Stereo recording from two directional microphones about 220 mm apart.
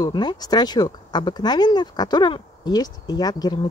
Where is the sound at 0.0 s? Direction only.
20° left (ahead or behind).